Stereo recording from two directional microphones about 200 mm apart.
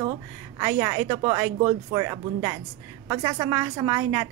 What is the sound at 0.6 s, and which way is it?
A woman's voice, 15° right (ahead or behind).